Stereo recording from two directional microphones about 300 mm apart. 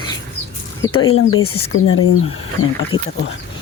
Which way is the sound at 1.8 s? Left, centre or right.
Left.